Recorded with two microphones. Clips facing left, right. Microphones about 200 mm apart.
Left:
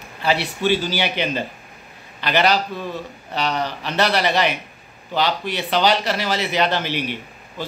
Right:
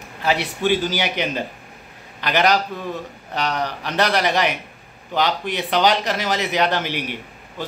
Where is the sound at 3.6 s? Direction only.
15° right (ahead or behind).